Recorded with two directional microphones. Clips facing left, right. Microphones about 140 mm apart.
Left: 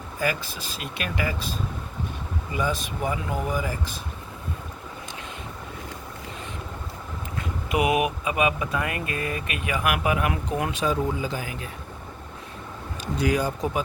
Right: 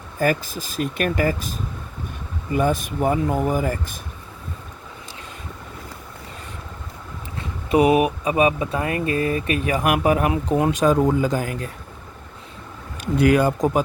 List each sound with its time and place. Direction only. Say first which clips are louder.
0.2 s speech: right 6 dB; 45° right (ahead or behind)
2.5 s speech: right 7 dB; 50° right (ahead or behind)
7.3 s speech: right 7 dB; 30° right (ahead or behind)
13.1 s speech: right 8 dB; 60° right (ahead or behind)